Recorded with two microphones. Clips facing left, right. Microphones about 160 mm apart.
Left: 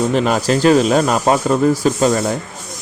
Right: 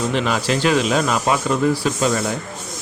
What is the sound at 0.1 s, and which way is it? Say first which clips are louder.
Speech: left 5 dB; 40° left (ahead or behind).